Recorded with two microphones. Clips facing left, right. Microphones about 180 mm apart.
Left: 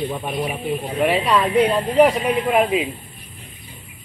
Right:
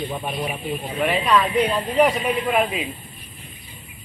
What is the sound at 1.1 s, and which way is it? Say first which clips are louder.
A woman's voice: even; 10° left (ahead or behind).